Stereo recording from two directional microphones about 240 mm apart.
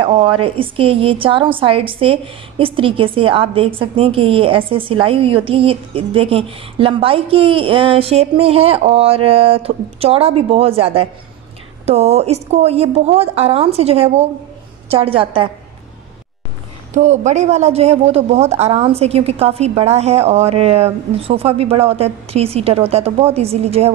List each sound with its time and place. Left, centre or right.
0.0 s a woman's voice: right
16.9 s a woman's voice: right